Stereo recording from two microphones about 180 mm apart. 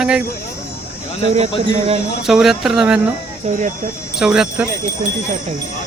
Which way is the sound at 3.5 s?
40° right (ahead or behind).